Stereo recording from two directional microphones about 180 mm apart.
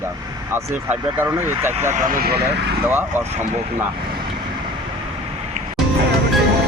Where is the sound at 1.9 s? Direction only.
55° right (ahead or behind).